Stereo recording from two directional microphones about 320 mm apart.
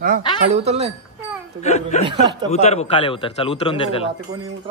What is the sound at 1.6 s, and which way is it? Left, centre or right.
Speech, left.